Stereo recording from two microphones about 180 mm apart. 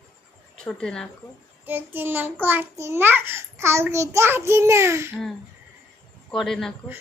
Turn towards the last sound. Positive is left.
turn(degrees=0)  # may be behind; listen again after turning